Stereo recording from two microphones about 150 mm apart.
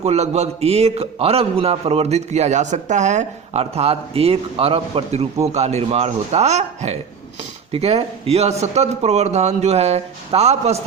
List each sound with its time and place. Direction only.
0.0 s a man's voice: 45° right (ahead or behind)